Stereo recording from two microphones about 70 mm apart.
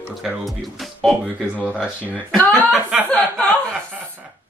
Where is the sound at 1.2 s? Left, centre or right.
Centre.